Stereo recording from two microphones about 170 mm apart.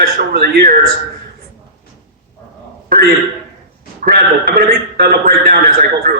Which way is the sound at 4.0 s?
65° right (ahead or behind).